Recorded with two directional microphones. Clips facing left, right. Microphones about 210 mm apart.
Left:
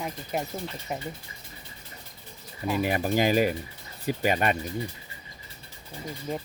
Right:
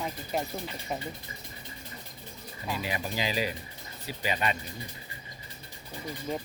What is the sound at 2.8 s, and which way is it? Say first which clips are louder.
Speech: left 9 dB; 50° left (ahead or behind).